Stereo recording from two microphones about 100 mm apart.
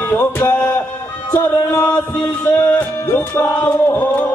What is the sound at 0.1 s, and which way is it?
Music, 25° left (ahead or behind).